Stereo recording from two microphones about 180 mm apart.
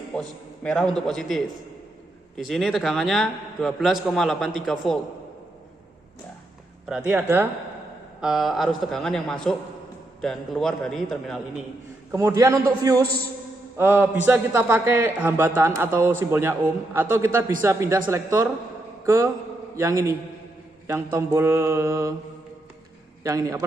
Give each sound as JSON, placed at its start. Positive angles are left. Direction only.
{"t": 0.1, "sound": "a man's voice", "side_deg": 5}
{"t": 6.8, "sound": "a man's voice", "side_deg": -10}
{"t": 8.2, "sound": "a man's voice", "side_deg": 0}
{"t": 12.1, "sound": "a man's voice", "side_deg": -15}
{"t": 23.2, "sound": "a man's voice", "side_deg": -20}